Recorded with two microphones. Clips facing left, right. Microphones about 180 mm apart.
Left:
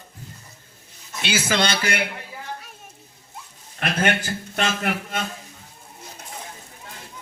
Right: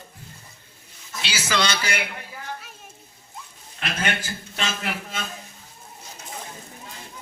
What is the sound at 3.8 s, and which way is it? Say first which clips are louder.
A man's voice: left 5 dB; 50° left (ahead or behind).